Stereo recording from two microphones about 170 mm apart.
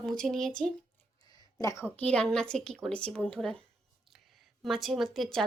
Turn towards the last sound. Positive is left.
turn(degrees=0)  # may be behind; listen again after turning